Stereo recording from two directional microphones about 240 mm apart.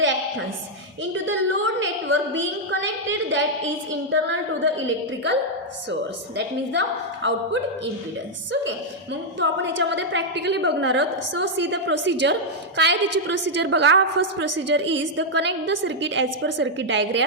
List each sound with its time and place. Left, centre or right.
1.1 s a woman's voice: right
4.8 s a woman's voice: right
9.4 s a woman's voice: right